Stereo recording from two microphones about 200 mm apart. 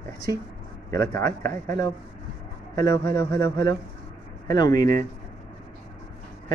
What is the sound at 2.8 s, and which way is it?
Speech, 15° left (ahead or behind).